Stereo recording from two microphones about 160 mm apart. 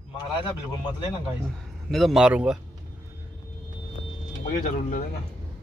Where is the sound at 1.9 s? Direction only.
Centre (ahead or behind).